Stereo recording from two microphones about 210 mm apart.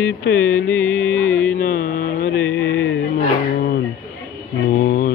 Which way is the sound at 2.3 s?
10° left (ahead or behind).